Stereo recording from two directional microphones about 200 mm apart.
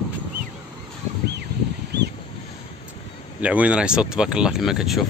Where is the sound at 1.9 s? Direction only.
60° right (ahead or behind).